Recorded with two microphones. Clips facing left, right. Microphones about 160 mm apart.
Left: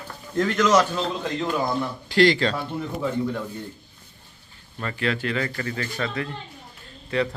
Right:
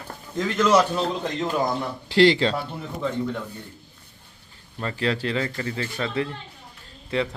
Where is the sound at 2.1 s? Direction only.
25° right (ahead or behind).